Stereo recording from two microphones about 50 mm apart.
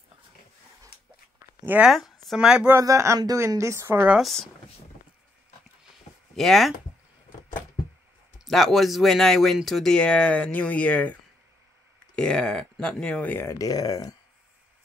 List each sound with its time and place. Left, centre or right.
1.9 s a sound: centre
2.3 s speech: centre
2.7 s speech: right
6.3 s speech: centre
8.5 s speech: centre
9.9 s speech: left
12.2 s speech: centre
13.4 s speech: left